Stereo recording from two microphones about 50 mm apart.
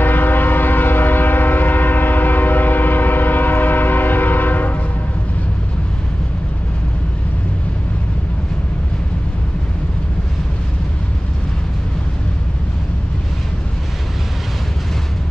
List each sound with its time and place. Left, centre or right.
0.0 s train: left